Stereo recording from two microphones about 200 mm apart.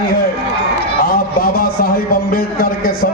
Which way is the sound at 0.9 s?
50° left (ahead or behind).